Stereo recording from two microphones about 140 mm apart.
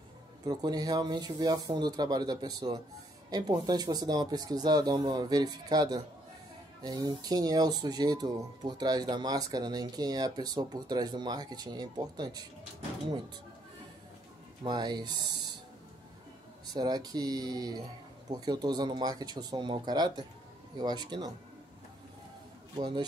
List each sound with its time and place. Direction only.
0.5 s speech: 30° right (ahead or behind)
14.6 s speech: 30° right (ahead or behind)
16.7 s speech: 30° right (ahead or behind)
22.8 s speech: 35° right (ahead or behind)